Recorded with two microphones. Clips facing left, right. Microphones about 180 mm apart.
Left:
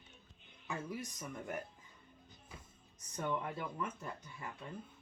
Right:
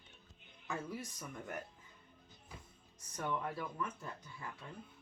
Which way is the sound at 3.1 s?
20° left (ahead or behind).